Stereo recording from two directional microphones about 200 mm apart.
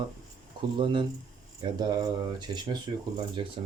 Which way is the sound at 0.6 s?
25° right (ahead or behind).